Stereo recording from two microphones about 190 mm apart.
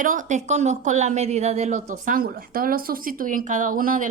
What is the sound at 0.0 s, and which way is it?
A woman's voice, 45° right (ahead or behind).